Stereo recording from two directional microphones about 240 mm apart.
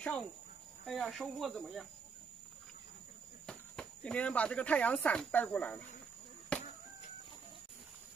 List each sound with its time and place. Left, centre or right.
0.0 s speech: centre
3.4 s speech: centre
6.5 s a sound: centre